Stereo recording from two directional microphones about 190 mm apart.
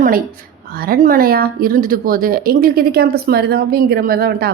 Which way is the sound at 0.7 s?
50° right (ahead or behind).